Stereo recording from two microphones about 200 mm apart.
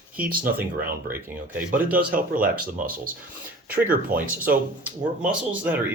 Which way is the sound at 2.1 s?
45° right (ahead or behind).